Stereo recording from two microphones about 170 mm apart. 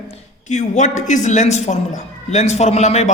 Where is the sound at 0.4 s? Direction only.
45° left (ahead or behind).